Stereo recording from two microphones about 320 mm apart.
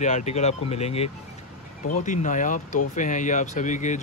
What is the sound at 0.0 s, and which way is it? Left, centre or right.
Speech, left.